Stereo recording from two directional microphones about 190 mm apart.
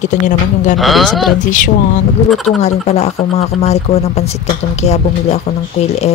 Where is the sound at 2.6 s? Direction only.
35° left (ahead or behind).